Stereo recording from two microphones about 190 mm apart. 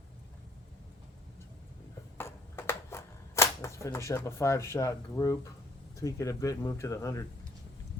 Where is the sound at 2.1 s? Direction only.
15° left (ahead or behind).